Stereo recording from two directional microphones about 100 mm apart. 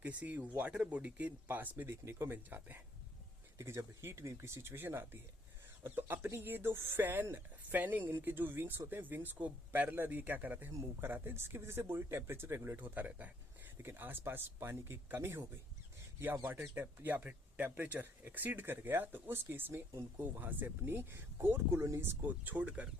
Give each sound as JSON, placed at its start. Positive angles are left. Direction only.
{"t": 0.0, "sound": "speech", "side_deg": -15}
{"t": 22.4, "sound": "speech", "side_deg": -15}